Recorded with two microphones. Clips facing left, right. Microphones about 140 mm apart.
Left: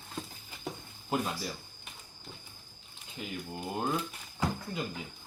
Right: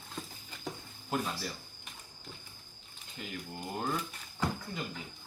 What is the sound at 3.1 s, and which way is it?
Speech, 10° left (ahead or behind).